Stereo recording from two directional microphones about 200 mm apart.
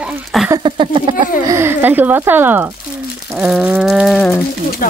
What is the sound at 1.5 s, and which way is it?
Speech, 10° right (ahead or behind).